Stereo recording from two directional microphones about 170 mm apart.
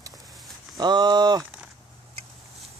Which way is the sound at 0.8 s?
25° right (ahead or behind).